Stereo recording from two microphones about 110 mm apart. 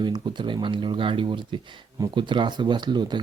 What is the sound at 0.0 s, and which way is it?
Speech, 45° right (ahead or behind).